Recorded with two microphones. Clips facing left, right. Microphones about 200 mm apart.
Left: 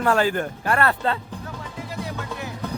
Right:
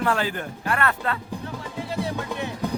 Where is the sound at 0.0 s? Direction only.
45° left (ahead or behind).